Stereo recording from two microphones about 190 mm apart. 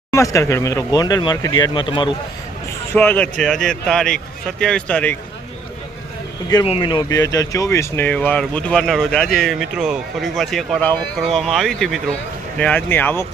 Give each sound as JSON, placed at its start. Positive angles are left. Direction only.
{"t": 0.1, "sound": "speech", "side_deg": 15}
{"t": 2.9, "sound": "speech", "side_deg": 10}
{"t": 6.7, "sound": "speech", "side_deg": 25}